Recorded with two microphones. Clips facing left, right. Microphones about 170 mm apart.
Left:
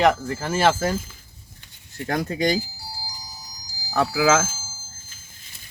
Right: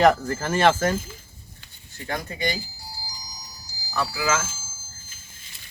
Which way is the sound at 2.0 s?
70° left (ahead or behind).